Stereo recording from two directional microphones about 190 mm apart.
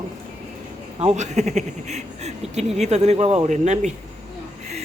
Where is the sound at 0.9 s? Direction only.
35° right (ahead or behind).